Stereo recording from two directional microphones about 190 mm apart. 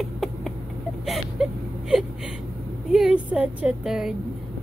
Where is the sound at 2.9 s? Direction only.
5° right (ahead or behind).